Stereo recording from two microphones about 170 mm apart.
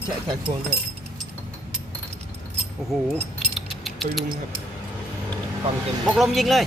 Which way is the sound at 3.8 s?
Centre (ahead or behind).